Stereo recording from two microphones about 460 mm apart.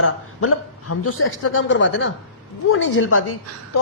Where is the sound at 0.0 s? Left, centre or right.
Left.